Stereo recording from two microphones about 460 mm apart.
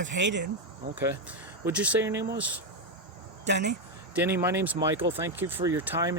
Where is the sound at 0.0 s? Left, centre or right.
Right.